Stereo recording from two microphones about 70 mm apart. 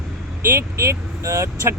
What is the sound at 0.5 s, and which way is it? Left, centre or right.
Speech, right.